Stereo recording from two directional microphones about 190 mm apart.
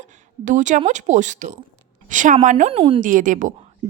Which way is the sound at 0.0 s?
40° right (ahead or behind).